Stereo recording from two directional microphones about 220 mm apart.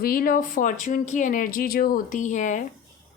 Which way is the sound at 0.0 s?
40° left (ahead or behind).